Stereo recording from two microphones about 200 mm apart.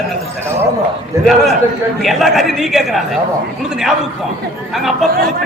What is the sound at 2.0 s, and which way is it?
Speech, centre (ahead or behind).